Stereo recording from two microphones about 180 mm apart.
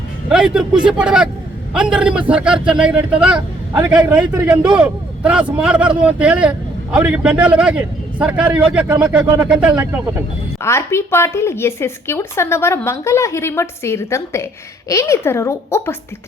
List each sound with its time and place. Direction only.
0.3 s a man's voice: 5° right (ahead or behind)
10.6 s speech: 15° left (ahead or behind)